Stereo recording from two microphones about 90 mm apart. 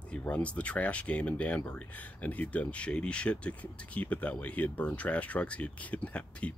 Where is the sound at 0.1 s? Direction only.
15° left (ahead or behind).